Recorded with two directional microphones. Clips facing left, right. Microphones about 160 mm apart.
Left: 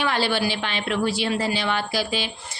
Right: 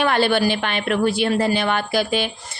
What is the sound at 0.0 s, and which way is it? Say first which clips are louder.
A woman's voice: right 5 dB; 55° right (ahead or behind).